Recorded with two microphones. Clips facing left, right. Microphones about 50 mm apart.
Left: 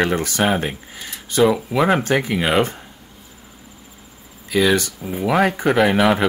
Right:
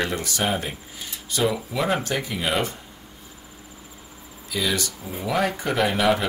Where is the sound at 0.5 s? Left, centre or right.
Left.